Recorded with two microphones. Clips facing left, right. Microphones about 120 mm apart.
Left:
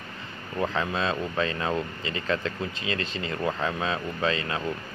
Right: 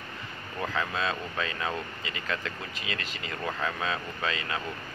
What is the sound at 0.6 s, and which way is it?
Speech, 25° left (ahead or behind).